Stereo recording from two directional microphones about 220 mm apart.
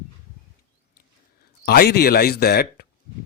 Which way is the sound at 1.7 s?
45° left (ahead or behind).